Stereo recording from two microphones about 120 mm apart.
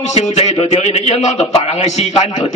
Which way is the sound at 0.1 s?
65° left (ahead or behind).